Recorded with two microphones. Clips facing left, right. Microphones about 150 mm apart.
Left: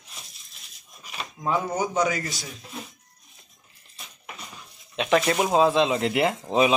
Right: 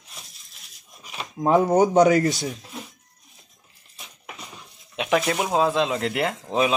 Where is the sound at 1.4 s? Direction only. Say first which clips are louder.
Right 8 dB; 55° right (ahead or behind).